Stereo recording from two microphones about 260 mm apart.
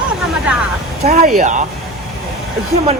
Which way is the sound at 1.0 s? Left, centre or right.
Right.